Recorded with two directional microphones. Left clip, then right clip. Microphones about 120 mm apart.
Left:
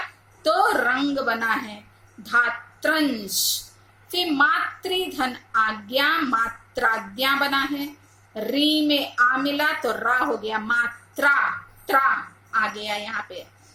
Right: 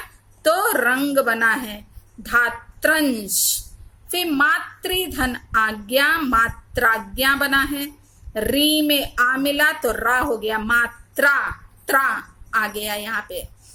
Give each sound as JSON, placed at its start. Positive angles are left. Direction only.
{"t": 0.4, "sound": "a woman's voice", "side_deg": -35}